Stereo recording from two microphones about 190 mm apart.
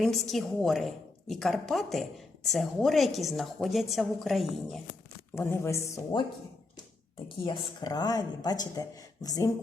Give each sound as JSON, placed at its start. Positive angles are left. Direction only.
{"t": 0.0, "sound": "a woman's voice", "side_deg": 0}
{"t": 5.3, "sound": "a woman's voice", "side_deg": 10}
{"t": 7.4, "sound": "speech", "side_deg": 25}